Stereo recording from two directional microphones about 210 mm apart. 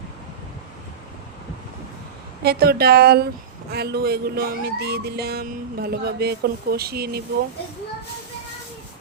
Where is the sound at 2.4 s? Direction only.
50° right (ahead or behind).